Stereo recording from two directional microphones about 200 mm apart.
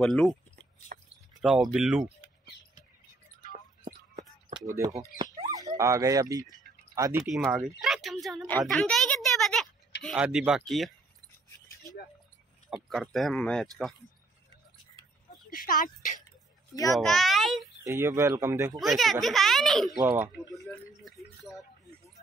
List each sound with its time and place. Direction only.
0.0 s speech: centre (ahead or behind)
0.9 s a sound: 45° right (ahead or behind)
1.4 s speech: centre (ahead or behind)
3.8 s a sound: 40° right (ahead or behind)
4.6 s speech: 15° right (ahead or behind)
5.2 s bird: 20° right (ahead or behind)
5.8 s speech: 15° right (ahead or behind)
7.8 s a sound: centre (ahead or behind)
10.0 s speech: 5° right (ahead or behind)
12.6 s speech: centre (ahead or behind)
15.5 s speech: 45° left (ahead or behind)
16.9 s speech: centre (ahead or behind)
17.8 s speech: 15° right (ahead or behind)
18.8 s speech: centre (ahead or behind)